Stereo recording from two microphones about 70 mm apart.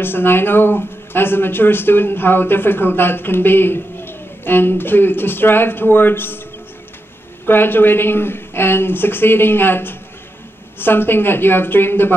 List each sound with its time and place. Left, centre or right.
0.0 s speech: left
7.4 s speech: left